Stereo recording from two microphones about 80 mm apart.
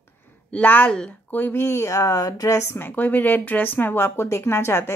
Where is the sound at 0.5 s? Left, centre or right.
Centre.